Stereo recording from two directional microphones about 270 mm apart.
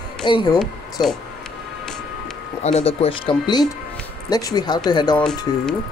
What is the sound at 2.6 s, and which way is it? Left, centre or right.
Speech, left.